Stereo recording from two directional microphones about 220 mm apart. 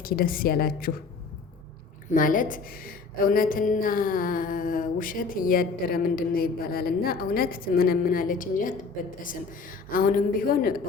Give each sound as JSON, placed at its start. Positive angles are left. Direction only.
{"t": 0.0, "sound": "a woman's voice", "side_deg": 40}
{"t": 2.0, "sound": "a woman's voice", "side_deg": 40}